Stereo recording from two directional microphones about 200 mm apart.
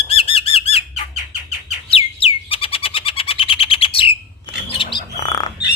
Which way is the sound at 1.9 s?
30° left (ahead or behind).